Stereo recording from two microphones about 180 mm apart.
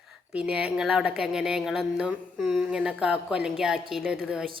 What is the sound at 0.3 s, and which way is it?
Speech, 5° right (ahead or behind).